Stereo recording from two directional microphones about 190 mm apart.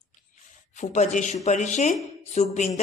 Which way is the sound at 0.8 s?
40° left (ahead or behind).